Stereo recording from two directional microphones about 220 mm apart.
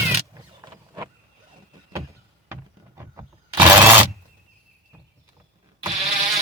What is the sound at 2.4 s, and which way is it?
Vehicle, 10° right (ahead or behind).